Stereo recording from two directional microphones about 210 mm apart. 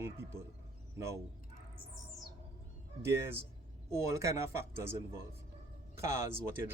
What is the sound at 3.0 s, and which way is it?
Speech, 15° right (ahead or behind).